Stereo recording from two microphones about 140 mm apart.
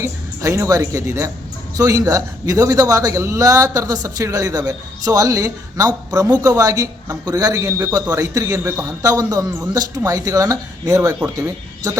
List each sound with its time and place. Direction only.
0.0 s a man's voice: 20° right (ahead or behind)